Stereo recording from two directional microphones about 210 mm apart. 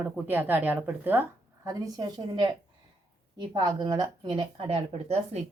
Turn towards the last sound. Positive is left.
turn(degrees=-30)  # may be behind; listen again after turning